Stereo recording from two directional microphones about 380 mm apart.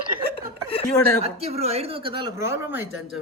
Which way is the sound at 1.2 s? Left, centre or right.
Centre.